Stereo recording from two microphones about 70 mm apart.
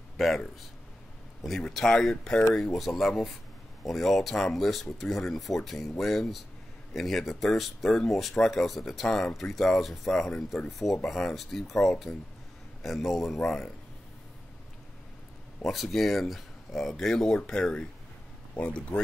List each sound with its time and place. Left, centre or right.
1.4 s speech: centre
15.6 s speech: centre